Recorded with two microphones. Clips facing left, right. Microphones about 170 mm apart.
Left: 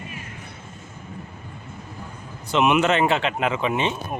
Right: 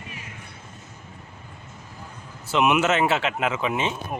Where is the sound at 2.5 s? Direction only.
5° right (ahead or behind).